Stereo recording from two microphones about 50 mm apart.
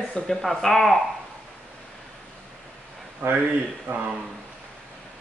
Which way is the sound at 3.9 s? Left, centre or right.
Right.